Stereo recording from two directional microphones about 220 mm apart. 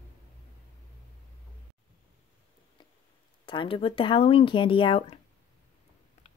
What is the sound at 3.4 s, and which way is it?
Speech, 25° left (ahead or behind).